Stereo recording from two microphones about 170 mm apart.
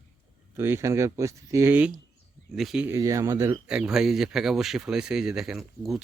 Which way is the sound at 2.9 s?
20° right (ahead or behind).